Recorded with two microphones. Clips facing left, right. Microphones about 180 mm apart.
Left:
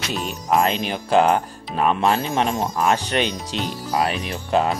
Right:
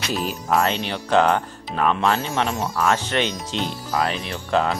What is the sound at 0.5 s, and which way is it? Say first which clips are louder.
Speech: left 2 dB; 15° left (ahead or behind).